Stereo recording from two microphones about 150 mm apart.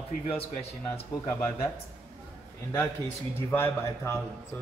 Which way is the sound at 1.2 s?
20° left (ahead or behind).